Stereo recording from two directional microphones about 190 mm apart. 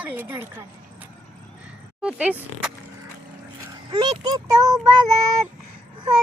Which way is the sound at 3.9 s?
20° right (ahead or behind).